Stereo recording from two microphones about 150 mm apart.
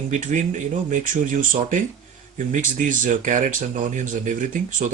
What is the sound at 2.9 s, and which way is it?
Speech, 60° right (ahead or behind).